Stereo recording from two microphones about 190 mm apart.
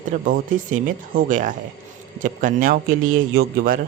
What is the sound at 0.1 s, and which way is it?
Speech, 45° right (ahead or behind).